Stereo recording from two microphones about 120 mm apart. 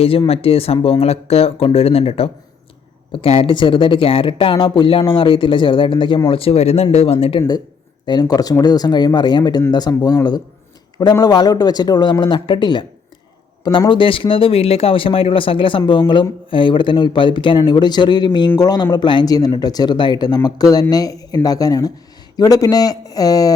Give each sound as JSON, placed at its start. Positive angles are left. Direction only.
{"t": 0.0, "sound": "speech", "side_deg": 55}
{"t": 8.0, "sound": "speech", "side_deg": 35}